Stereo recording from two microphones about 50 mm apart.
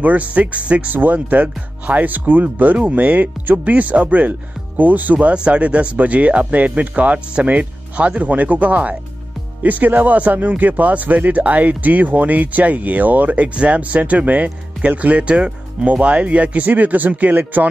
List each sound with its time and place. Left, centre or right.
0.0 s speech: right
0.8 s speech: right
5.3 s speech: right